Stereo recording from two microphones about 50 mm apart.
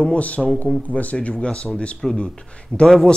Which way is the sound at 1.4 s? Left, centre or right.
Centre.